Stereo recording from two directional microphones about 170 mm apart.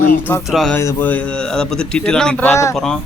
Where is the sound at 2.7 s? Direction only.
5° left (ahead or behind).